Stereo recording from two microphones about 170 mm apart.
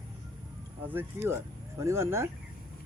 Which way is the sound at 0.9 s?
15° right (ahead or behind).